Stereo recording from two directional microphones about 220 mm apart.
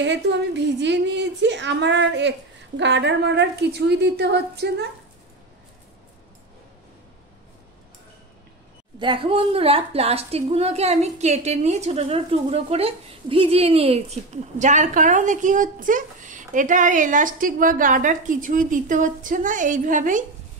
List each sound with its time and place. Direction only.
0.0 s a woman's voice: 55° right (ahead or behind)
9.0 s a woman's voice: 20° right (ahead or behind)